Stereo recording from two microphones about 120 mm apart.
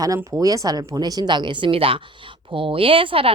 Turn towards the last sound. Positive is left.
turn(degrees=-50)  # may be behind; listen again after turning